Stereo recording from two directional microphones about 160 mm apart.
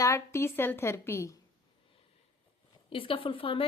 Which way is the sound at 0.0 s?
15° left (ahead or behind).